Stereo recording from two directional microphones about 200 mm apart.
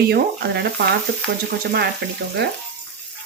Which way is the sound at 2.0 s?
55° right (ahead or behind).